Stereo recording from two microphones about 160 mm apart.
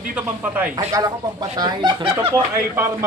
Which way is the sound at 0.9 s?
25° right (ahead or behind).